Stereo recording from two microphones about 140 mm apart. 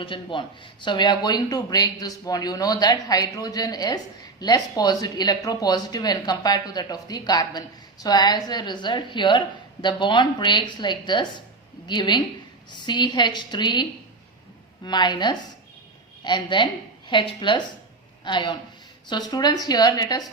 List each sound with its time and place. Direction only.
0.0 s a woman's voice: 35° left (ahead or behind)
14.8 s a woman's voice: 30° left (ahead or behind)